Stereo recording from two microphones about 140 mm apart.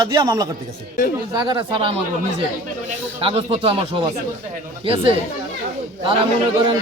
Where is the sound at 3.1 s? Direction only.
45° right (ahead or behind).